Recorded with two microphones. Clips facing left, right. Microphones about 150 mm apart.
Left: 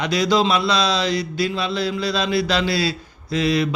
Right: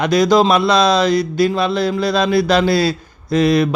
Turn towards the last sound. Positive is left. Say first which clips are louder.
# right 6 dB
turn(degrees=-50)  # may be behind; listen again after turning